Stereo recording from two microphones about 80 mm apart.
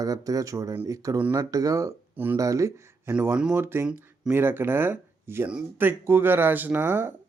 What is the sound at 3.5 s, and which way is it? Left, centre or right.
Speech, right.